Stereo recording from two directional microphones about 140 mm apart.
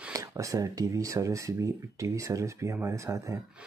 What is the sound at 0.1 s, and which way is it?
Speech, 20° right (ahead or behind).